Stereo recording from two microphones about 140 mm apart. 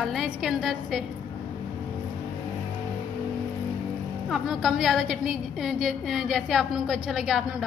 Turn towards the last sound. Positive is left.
turn(degrees=0)  # may be behind; listen again after turning